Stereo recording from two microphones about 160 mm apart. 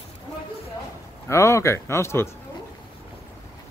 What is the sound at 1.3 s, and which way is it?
Speech, 15° left (ahead or behind).